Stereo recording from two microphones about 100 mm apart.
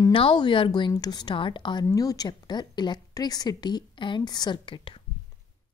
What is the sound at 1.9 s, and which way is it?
A woman's voice, 35° left (ahead or behind).